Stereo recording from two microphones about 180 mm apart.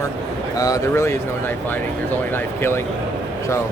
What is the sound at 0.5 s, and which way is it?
Speech, 20° left (ahead or behind).